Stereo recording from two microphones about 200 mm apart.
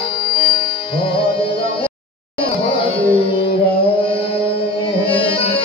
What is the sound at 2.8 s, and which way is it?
Music, 25° left (ahead or behind).